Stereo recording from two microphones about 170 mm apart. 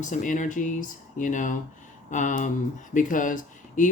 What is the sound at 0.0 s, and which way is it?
Speech, 50° left (ahead or behind).